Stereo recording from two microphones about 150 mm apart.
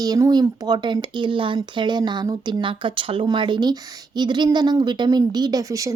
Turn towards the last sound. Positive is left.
turn(degrees=-20)  # may be behind; listen again after turning